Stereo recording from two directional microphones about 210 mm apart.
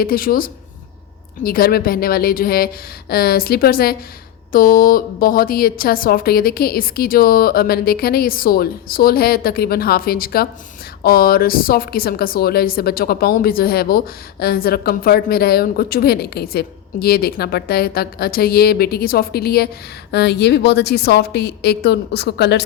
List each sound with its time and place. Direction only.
0.0 s speech: 45° left (ahead or behind)